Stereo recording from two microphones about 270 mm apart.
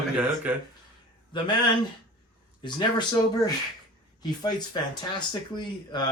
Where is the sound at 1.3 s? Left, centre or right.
Centre.